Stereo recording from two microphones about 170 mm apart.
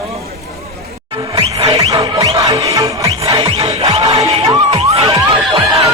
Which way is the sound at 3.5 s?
35° right (ahead or behind).